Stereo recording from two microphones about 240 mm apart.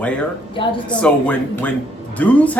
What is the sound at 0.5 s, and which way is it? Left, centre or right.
Speech, centre.